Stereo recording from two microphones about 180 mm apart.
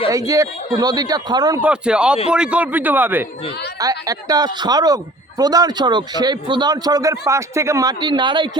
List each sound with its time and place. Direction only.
0.1 s a man's voice: 20° right (ahead or behind)
1.6 s a man's voice: 5° right (ahead or behind); by 8.4 s 25° right (ahead or behind)